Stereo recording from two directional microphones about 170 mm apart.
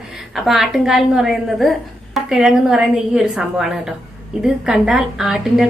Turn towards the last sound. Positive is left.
turn(degrees=-5)  # may be behind; listen again after turning